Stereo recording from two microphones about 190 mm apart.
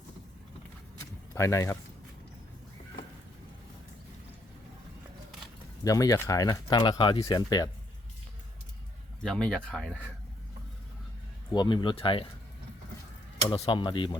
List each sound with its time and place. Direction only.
1.3 s speech: 15° left (ahead or behind)
5.8 s speech: 20° left (ahead or behind)
9.2 s speech: 5° left (ahead or behind)
11.5 s speech: 25° left (ahead or behind)
13.5 s speech: 25° left (ahead or behind)